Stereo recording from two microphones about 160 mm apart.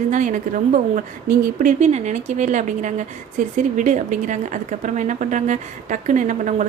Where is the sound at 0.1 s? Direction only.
50° right (ahead or behind).